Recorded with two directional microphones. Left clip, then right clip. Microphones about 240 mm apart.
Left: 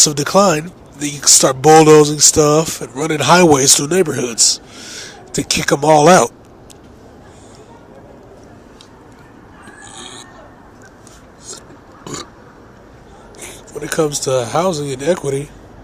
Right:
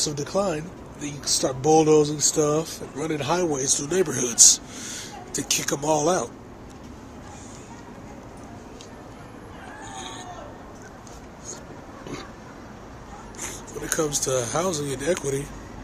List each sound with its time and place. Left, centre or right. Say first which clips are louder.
0.0 s speech: left 13 dB; left
13.8 s speech: left 8 dB; left